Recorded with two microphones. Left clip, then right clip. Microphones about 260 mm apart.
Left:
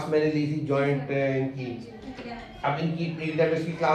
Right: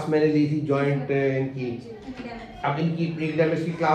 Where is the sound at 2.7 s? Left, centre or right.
Left.